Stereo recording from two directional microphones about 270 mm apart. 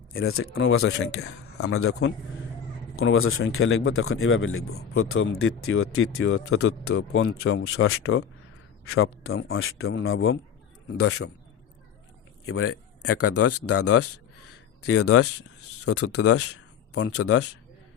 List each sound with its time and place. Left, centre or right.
0.3 s speech: left
12.5 s speech: left